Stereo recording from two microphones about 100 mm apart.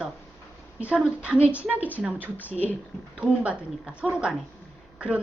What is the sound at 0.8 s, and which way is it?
A woman's voice, 10° right (ahead or behind).